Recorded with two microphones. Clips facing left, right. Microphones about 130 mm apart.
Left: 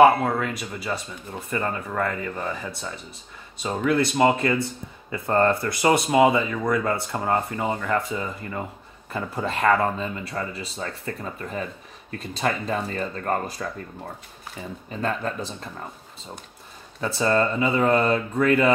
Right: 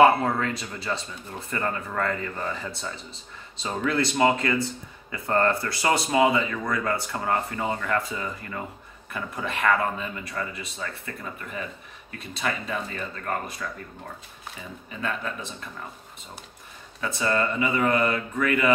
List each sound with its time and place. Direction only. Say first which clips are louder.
0.0 s speech: left 2 dB; 10° left (ahead or behind); by 10.9 s 30° left (ahead or behind)
12.1 s speech: left 4 dB; 40° left (ahead or behind)
14.9 s speech: left 4 dB; 40° left (ahead or behind)
17.2 s speech: left 4 dB; 30° left (ahead or behind)